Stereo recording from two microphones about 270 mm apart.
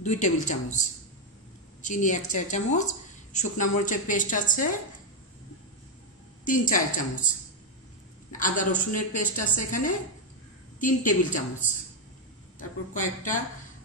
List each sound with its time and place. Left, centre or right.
0.0 s a woman's voice: left
6.4 s a woman's voice: left
8.3 s a woman's voice: left